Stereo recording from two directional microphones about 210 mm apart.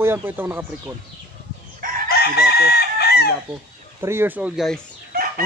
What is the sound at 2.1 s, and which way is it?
Chicken, 50° left (ahead or behind).